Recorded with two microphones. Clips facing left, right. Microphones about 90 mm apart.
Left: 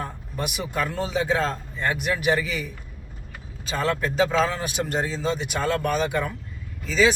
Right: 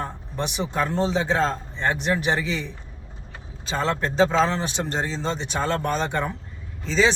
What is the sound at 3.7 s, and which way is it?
Speech, 25° right (ahead or behind).